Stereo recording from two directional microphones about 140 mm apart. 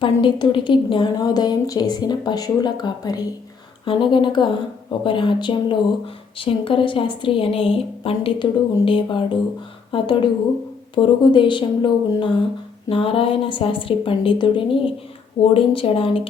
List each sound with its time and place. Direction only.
0.0 s a woman's voice: 35° left (ahead or behind)